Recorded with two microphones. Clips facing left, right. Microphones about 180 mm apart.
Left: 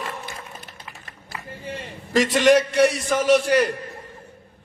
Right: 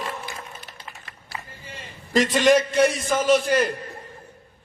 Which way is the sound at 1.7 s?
65° left (ahead or behind).